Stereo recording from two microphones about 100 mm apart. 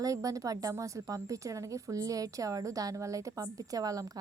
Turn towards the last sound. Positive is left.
turn(degrees=-35)  # may be behind; listen again after turning